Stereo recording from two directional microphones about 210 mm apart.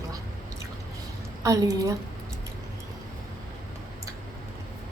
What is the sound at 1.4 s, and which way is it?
Speech, 15° right (ahead or behind).